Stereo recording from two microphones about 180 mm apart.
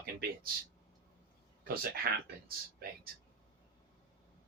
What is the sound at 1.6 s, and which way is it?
Speech, 55° right (ahead or behind).